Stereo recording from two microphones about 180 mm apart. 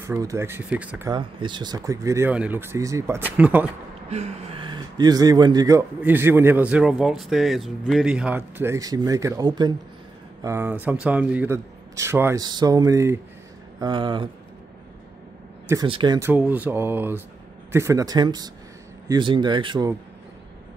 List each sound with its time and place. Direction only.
0.0 s speech: 15° right (ahead or behind)
1.1 s speech: 25° right (ahead or behind); by 3.7 s 10° right (ahead or behind)
4.1 s a sound: 35° right (ahead or behind)
4.6 s speech: 25° right (ahead or behind)
10.4 s speech: 10° right (ahead or behind); by 14.3 s 25° right (ahead or behind)
15.9 s speech: 25° right (ahead or behind)
16.2 s speech: 10° right (ahead or behind)